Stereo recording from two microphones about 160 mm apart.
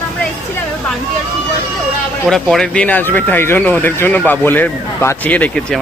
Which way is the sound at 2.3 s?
Centre (ahead or behind).